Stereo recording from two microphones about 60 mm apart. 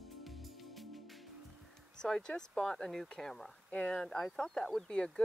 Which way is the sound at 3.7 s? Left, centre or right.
Centre.